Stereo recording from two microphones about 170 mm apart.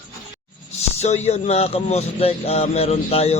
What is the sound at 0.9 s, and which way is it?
A man's voice, 40° left (ahead or behind).